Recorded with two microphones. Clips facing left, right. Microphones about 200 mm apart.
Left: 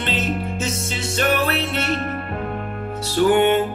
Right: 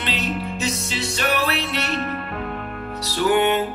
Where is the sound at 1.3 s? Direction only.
50° left (ahead or behind).